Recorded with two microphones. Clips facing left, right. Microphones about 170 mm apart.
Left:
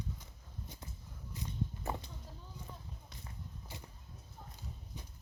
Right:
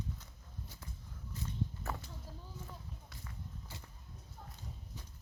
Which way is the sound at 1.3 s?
15° left (ahead or behind).